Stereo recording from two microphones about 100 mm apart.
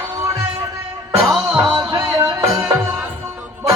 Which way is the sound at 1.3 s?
40° right (ahead or behind).